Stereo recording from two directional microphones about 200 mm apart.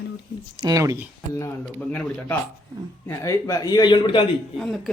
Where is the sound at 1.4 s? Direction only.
10° left (ahead or behind).